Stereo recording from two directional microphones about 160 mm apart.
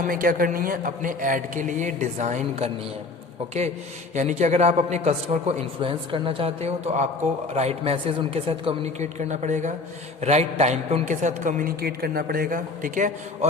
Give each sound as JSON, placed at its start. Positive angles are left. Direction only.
{"t": 0.0, "sound": "a man's voice", "side_deg": -60}
{"t": 4.1, "sound": "a man's voice", "side_deg": -50}
{"t": 9.1, "sound": "a man's voice", "side_deg": -50}